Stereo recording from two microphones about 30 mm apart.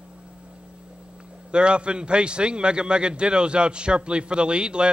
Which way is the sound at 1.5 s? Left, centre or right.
Right.